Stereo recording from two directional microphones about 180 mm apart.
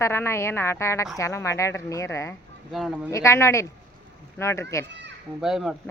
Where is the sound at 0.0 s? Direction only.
15° left (ahead or behind).